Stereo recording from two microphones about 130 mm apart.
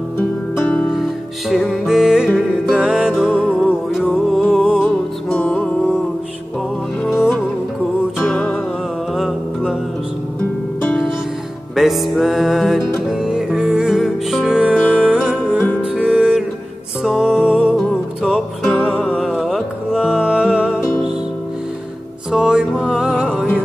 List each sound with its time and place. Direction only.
0.6 s music: 10° left (ahead or behind)
3.3 s music: 5° left (ahead or behind)
8.2 s music: 5° left (ahead or behind)
11.7 s music: centre (ahead or behind)
22.3 s music: 5° right (ahead or behind)